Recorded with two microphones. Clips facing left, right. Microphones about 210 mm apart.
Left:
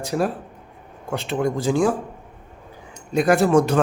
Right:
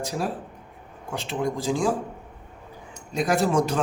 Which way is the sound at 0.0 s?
60° left (ahead or behind).